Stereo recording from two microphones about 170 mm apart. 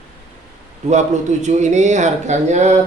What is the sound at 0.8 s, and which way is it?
Speech, 45° right (ahead or behind).